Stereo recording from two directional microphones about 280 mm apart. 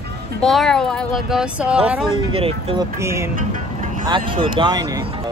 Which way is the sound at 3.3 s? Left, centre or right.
Right.